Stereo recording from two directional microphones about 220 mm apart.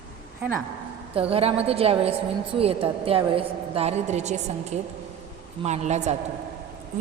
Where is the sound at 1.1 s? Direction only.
25° right (ahead or behind).